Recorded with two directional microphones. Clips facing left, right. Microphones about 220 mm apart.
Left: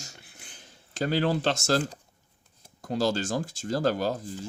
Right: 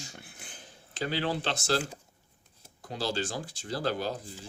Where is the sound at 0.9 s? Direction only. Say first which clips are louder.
Left 5 dB; 45° left (ahead or behind).